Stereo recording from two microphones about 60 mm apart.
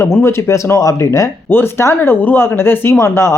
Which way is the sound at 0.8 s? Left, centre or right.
Left.